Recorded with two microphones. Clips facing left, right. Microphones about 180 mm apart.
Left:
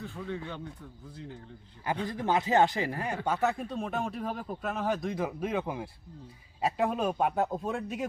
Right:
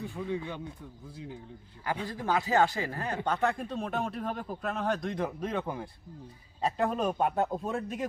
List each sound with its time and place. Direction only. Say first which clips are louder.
0.0 s speech: right 3 dB; 15° right (ahead or behind)
2.0 s speech: left 2 dB; 20° left (ahead or behind)
3.2 s speech: even; 5° left (ahead or behind)